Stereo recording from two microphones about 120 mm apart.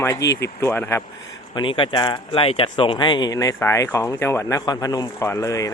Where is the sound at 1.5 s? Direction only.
45° left (ahead or behind).